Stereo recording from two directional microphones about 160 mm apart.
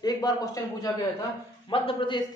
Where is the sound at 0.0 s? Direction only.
25° left (ahead or behind).